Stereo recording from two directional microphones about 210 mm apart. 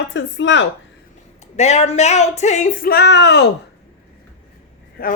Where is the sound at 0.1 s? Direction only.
60° left (ahead or behind).